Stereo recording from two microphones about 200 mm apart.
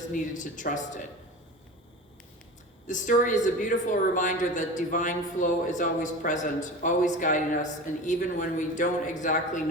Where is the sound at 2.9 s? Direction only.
40° left (ahead or behind).